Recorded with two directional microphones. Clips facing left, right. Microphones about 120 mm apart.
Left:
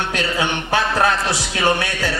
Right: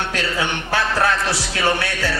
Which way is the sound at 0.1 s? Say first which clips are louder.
Left 2 dB; 15° left (ahead or behind).